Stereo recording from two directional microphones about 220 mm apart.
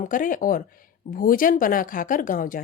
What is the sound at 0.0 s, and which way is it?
A woman's voice, 35° left (ahead or behind).